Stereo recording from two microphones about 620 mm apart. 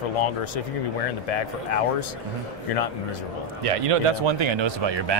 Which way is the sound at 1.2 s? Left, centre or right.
Left.